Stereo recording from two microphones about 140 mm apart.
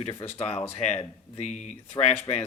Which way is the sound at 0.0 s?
45° left (ahead or behind).